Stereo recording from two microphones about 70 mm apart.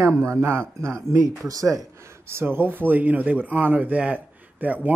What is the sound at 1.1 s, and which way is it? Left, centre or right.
Speech, right.